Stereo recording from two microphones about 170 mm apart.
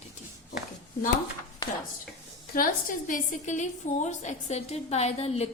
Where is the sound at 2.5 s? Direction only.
60° left (ahead or behind).